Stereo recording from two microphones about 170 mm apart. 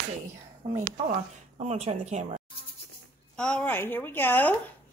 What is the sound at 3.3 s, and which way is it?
A woman's voice, 5° left (ahead or behind).